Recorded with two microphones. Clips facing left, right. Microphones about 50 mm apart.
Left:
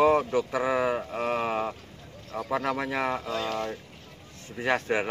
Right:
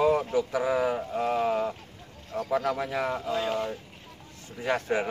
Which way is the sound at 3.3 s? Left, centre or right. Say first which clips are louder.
Right 2 dB; centre.